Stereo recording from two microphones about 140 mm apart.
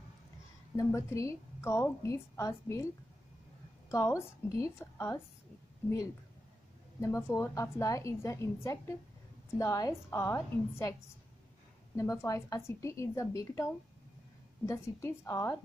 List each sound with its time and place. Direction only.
0.7 s a woman's voice: 20° left (ahead or behind)
3.9 s a woman's voice: 20° left (ahead or behind)
7.0 s a woman's voice: 20° left (ahead or behind)
14.7 s a woman's voice: 20° left (ahead or behind)